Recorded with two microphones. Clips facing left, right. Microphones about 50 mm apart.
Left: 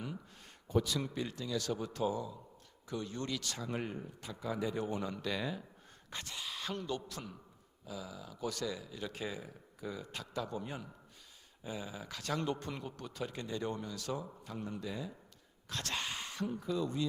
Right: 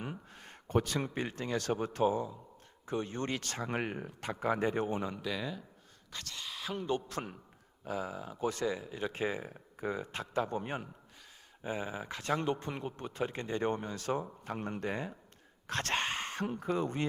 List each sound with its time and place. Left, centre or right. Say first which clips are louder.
0.0 s a man's voice: right 2 dB; right
3.8 s speech: right 4 dB; right
5.1 s speech: even; centre
6.1 s speech: even; left
6.3 s a sound: right 1 dB; centre
6.8 s speech: right 6 dB; right